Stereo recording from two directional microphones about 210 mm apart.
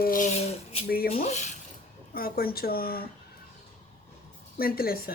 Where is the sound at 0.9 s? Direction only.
45° left (ahead or behind).